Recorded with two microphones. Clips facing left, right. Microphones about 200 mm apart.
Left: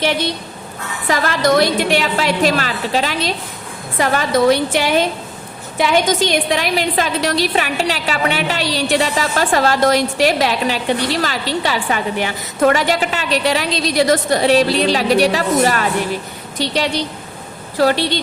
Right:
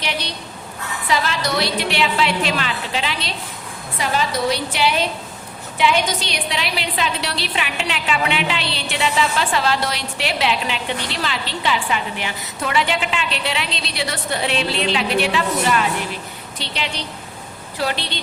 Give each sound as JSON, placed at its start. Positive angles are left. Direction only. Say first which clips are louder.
{"t": 1.0, "sound": "a woman's voice", "louder": "left 6 dB", "side_deg": 50}